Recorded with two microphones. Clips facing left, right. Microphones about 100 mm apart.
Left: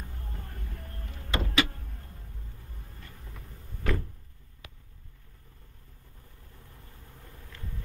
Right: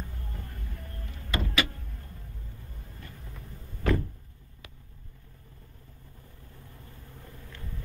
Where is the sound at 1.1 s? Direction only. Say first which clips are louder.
Even; 25° left (ahead or behind).